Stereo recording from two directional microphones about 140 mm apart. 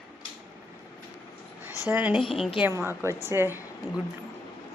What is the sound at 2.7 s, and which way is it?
Speech, 20° right (ahead or behind).